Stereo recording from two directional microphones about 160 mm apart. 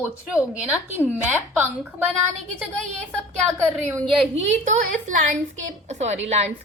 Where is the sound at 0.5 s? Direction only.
5° right (ahead or behind).